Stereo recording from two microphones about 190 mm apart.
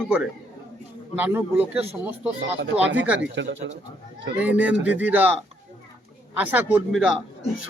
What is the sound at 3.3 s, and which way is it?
Speech, 70° right (ahead or behind).